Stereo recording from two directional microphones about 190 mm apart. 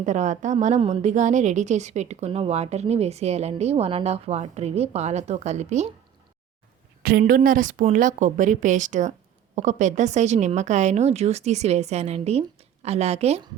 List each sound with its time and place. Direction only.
0.0 s a woman's voice: 40° right (ahead or behind)
7.0 s a woman's voice: 50° right (ahead or behind); by 13.5 s 35° right (ahead or behind)